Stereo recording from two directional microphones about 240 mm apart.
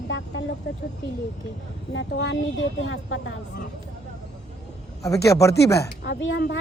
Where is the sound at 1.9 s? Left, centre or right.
Left.